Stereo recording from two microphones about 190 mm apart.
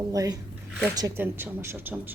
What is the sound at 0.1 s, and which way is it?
A woman's voice, 20° right (ahead or behind).